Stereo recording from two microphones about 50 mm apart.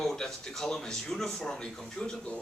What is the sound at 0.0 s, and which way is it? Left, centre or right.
A man's voice, centre.